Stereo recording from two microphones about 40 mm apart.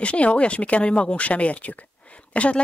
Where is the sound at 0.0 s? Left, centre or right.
Left.